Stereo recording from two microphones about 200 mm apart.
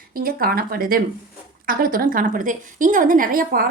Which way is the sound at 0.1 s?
50° right (ahead or behind).